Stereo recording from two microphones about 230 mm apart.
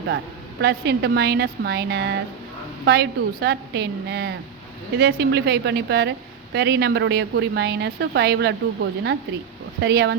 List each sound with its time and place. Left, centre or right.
0.6 s a woman's voice: right